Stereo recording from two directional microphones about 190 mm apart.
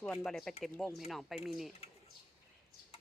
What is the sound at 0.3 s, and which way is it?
Speech, centre (ahead or behind).